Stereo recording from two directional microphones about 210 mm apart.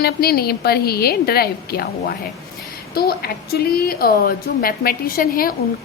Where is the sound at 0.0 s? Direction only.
45° left (ahead or behind).